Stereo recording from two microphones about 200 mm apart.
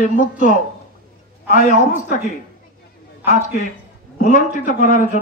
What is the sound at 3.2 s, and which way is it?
A man's voice, 35° left (ahead or behind).